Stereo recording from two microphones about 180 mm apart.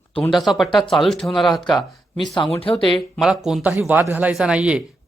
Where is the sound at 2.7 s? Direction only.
Centre (ahead or behind).